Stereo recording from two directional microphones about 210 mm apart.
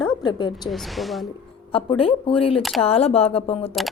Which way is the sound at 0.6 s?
Centre (ahead or behind).